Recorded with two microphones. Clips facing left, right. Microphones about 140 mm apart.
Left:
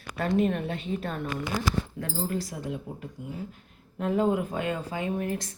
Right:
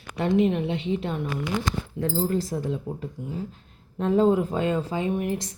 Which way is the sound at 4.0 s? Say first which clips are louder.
Right 5 dB; 30° right (ahead or behind).